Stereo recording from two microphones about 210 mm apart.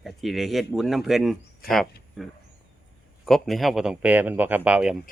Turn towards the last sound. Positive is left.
turn(degrees=-5)  # may be behind; listen again after turning